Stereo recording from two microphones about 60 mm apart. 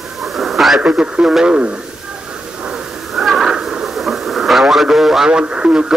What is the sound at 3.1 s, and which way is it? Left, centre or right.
Radio, centre.